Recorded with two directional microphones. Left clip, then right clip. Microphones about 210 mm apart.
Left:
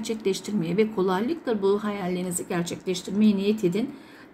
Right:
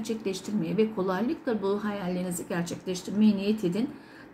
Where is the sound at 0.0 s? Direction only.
40° left (ahead or behind).